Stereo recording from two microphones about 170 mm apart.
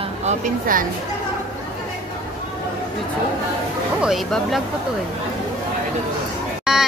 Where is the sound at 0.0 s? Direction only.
40° right (ahead or behind).